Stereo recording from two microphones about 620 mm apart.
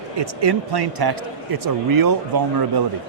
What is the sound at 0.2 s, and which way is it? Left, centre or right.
Speech, right.